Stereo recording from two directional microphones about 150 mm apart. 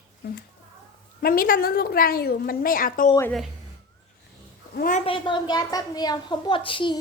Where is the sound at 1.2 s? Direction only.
70° left (ahead or behind).